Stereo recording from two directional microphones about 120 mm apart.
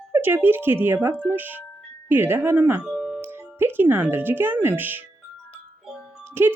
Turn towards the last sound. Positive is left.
turn(degrees=-20)  # may be behind; listen again after turning